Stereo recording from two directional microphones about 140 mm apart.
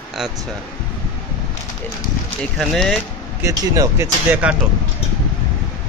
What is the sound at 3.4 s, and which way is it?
Speech, 25° right (ahead or behind).